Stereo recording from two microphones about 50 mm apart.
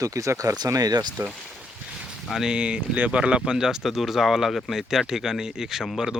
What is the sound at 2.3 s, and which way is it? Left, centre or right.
Speech, centre.